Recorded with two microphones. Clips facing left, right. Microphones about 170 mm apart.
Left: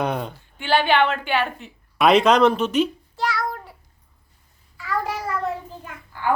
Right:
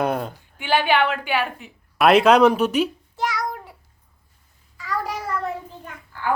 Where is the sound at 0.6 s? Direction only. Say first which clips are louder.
Left 1 dB; 15° right (ahead or behind).